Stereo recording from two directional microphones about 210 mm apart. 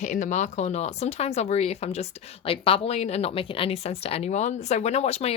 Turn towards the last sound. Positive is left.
turn(degrees=30)  # may be behind; listen again after turning